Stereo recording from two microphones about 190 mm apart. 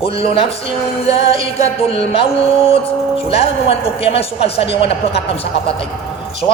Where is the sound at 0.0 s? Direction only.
30° left (ahead or behind).